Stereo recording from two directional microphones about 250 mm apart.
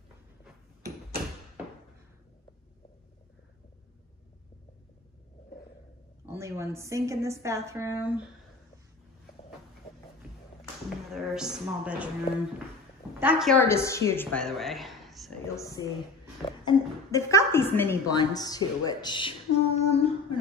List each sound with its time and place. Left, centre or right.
6.2 s a woman's voice: centre
11.1 s a woman's voice: centre
13.2 s a woman's voice: centre
15.4 s a woman's voice: centre